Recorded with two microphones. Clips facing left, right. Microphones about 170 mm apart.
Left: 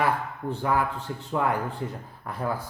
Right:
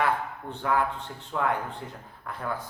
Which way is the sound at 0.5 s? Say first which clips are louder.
Left 1 dB; 5° left (ahead or behind).